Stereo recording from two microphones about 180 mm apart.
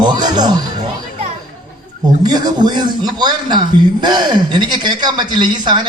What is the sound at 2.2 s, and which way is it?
A man's voice, 20° right (ahead or behind).